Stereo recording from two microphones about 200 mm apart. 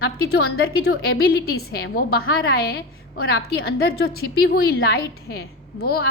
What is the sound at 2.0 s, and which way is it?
Speech, 50° left (ahead or behind).